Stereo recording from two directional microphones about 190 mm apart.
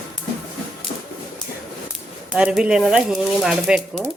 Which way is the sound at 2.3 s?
5° right (ahead or behind).